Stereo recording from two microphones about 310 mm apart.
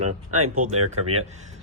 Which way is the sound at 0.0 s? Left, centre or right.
Right.